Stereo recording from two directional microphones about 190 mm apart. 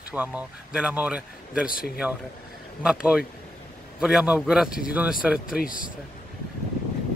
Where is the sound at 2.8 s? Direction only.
5° right (ahead or behind).